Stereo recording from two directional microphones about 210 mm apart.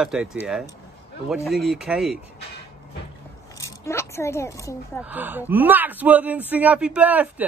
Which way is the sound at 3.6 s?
15° left (ahead or behind).